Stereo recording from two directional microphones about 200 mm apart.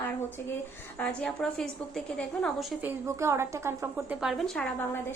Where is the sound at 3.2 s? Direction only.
15° right (ahead or behind); by 4.7 s 5° left (ahead or behind).